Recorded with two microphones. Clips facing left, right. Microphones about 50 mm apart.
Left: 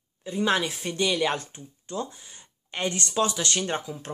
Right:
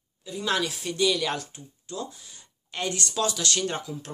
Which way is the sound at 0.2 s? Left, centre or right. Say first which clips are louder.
Left 3 dB; left.